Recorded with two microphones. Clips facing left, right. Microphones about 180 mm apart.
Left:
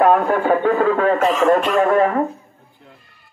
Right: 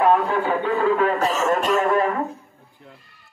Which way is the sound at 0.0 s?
50° left (ahead or behind).